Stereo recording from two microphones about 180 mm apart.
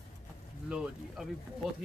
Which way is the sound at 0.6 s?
5° right (ahead or behind).